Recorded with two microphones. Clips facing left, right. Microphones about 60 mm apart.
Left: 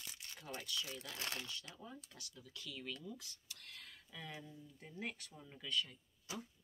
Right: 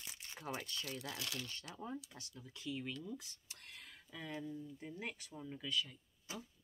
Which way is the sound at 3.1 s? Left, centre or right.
Right.